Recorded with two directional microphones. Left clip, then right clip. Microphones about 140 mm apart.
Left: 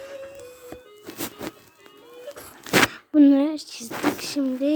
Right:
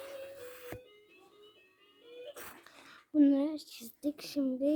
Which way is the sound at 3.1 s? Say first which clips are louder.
Left 11 dB; 20° left (ahead or behind).